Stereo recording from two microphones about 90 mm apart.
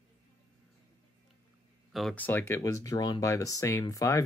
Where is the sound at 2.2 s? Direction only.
20° left (ahead or behind).